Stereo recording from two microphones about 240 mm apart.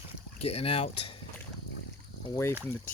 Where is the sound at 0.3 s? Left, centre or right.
Left.